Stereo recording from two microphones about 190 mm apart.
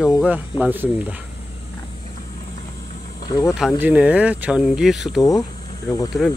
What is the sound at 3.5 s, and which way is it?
Speech, 5° right (ahead or behind).